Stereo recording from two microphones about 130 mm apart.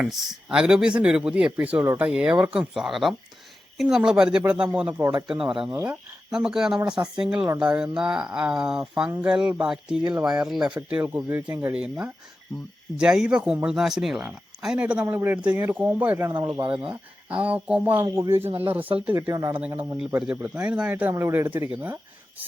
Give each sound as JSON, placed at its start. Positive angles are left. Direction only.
{"t": 0.0, "sound": "speech", "side_deg": -5}
{"t": 5.7, "sound": "speech", "side_deg": -15}
{"t": 6.3, "sound": "speech", "side_deg": -5}
{"t": 17.4, "sound": "speech", "side_deg": -10}
{"t": 19.3, "sound": "speech", "side_deg": -30}
{"t": 19.5, "sound": "speech", "side_deg": -15}